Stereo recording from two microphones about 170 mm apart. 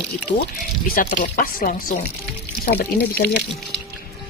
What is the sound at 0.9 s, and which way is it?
Speech, 50° left (ahead or behind).